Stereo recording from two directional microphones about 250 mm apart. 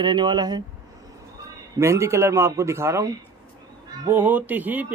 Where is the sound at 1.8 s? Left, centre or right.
Centre.